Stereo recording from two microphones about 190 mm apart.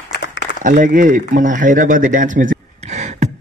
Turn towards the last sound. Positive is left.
turn(degrees=-35)  # may be behind; listen again after turning